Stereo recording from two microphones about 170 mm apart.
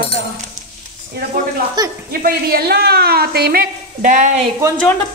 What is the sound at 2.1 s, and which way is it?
A woman's voice, 60° right (ahead or behind).